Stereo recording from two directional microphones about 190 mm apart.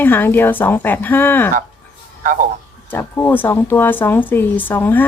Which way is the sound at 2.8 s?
10° left (ahead or behind).